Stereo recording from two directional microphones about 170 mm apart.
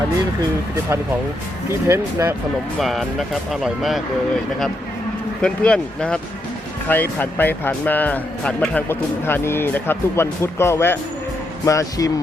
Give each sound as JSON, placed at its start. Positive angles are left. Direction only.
{"t": 1.9, "sound": "speech", "side_deg": -15}
{"t": 2.7, "sound": "speech", "side_deg": 0}
{"t": 5.4, "sound": "speech", "side_deg": 5}